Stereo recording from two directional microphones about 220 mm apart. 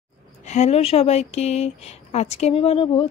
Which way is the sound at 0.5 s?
30° left (ahead or behind).